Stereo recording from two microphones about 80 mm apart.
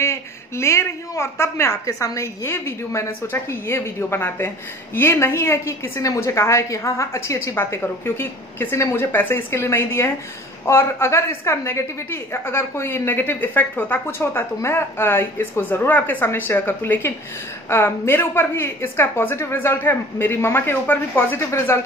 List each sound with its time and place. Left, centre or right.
0.0 s a woman's voice: left